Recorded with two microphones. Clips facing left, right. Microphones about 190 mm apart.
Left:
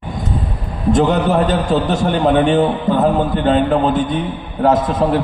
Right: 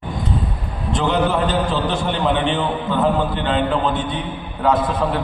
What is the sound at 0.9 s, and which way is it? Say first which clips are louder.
A man's voice: left 4 dB; 45° left (ahead or behind).